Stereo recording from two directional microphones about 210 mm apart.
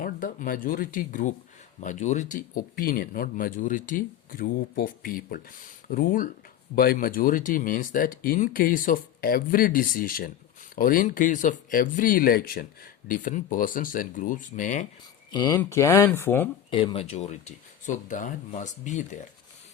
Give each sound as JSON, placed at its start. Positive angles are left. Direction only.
{"t": 0.0, "sound": "speech", "side_deg": 40}
{"t": 15.3, "sound": "speech", "side_deg": 20}
{"t": 16.6, "sound": "speech", "side_deg": 25}